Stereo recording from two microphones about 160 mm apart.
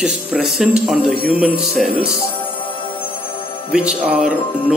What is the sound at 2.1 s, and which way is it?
Music, 35° left (ahead or behind).